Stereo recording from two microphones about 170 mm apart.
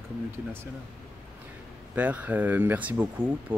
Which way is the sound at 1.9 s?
10° right (ahead or behind).